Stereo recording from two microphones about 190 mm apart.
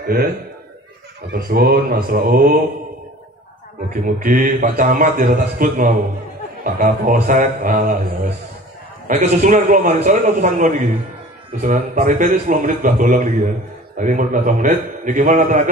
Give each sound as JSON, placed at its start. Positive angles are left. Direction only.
{"t": 0.0, "sound": "a man's voice", "side_deg": -50}
{"t": 1.3, "sound": "a man's voice", "side_deg": -50}
{"t": 4.0, "sound": "a man's voice", "side_deg": -45}